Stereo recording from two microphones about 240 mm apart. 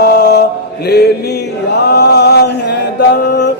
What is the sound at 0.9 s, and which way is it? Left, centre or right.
Mantra, left.